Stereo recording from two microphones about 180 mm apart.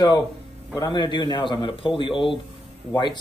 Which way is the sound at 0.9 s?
25° left (ahead or behind).